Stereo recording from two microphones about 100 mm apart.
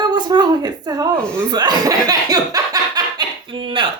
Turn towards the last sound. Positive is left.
turn(degrees=-50)  # may be behind; listen again after turning